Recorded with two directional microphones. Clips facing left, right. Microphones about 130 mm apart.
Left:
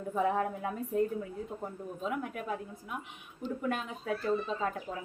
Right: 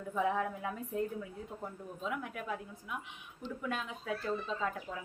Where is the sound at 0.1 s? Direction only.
45° left (ahead or behind).